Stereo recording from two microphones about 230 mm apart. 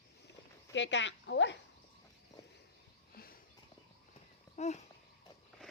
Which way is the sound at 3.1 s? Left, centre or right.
Left.